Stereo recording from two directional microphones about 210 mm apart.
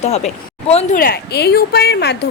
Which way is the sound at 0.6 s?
30° left (ahead or behind).